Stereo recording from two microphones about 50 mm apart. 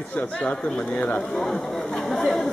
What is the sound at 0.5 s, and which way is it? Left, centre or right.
Speech, centre.